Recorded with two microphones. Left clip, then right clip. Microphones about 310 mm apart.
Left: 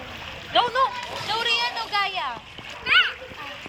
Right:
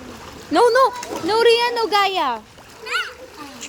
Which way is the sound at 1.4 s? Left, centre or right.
Centre.